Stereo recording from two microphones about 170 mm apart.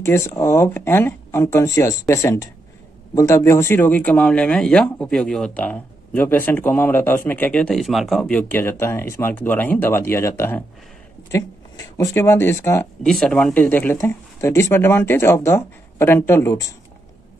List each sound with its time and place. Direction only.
0.0 s speech: 15° left (ahead or behind)
13.0 s speech: 5° left (ahead or behind)